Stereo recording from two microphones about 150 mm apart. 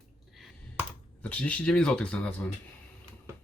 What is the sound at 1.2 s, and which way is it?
A man's voice, 10° left (ahead or behind).